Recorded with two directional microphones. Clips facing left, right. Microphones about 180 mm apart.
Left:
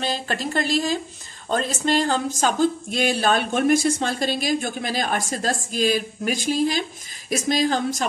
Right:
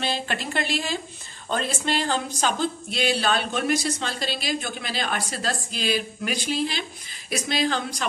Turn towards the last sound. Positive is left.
turn(degrees=45)  # may be behind; listen again after turning